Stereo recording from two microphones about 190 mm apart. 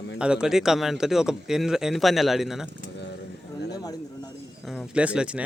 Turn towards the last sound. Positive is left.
turn(degrees=-5)  # may be behind; listen again after turning